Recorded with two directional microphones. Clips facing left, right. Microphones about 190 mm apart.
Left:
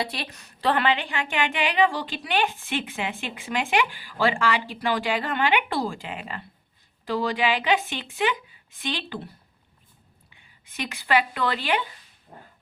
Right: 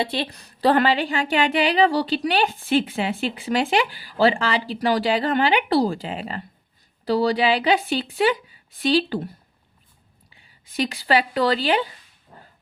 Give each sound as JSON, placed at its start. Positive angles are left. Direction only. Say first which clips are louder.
{"t": 0.0, "sound": "a woman's voice", "louder": "right 6 dB", "side_deg": -25}
{"t": 10.7, "sound": "a woman's voice", "louder": "right 4 dB", "side_deg": -35}
{"t": 12.3, "sound": "dog", "louder": "left 1 dB", "side_deg": 30}